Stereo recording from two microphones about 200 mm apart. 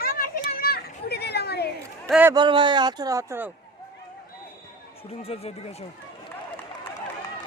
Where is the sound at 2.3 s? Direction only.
25° right (ahead or behind).